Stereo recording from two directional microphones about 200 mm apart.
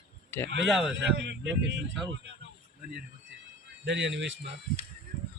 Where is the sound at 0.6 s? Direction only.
Centre (ahead or behind).